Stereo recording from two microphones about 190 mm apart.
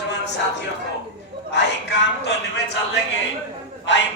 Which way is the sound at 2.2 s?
65° left (ahead or behind).